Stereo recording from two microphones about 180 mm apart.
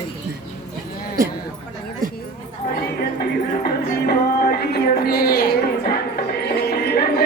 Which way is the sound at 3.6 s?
55° left (ahead or behind).